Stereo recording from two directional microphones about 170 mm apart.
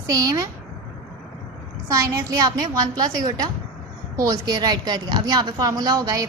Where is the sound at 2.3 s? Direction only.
20° right (ahead or behind).